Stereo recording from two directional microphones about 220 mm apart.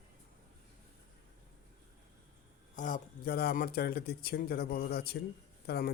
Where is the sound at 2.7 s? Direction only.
35° left (ahead or behind).